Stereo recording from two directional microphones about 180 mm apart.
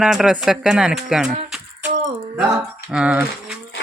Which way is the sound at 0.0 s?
5° right (ahead or behind).